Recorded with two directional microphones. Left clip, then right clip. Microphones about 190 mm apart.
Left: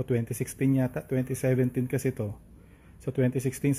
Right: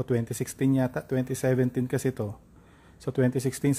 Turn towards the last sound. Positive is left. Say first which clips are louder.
# right 2 dB
turn(degrees=-15)  # may be behind; listen again after turning